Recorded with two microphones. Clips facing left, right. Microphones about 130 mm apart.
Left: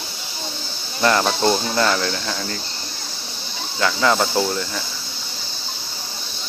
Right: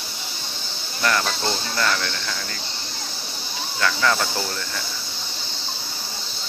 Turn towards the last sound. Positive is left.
turn(degrees=25)  # may be behind; listen again after turning